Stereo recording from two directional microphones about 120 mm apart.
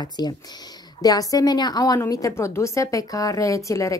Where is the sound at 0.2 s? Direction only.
35° left (ahead or behind).